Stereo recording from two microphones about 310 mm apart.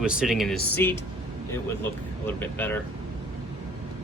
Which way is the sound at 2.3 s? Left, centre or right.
Centre.